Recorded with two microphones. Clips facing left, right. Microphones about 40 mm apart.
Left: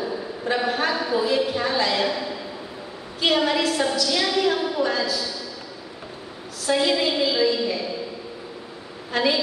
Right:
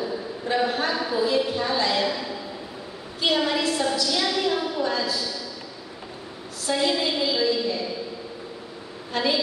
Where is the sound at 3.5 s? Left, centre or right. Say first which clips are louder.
Left 2 dB; left.